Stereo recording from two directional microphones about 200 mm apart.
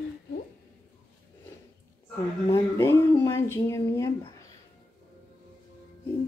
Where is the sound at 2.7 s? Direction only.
15° left (ahead or behind).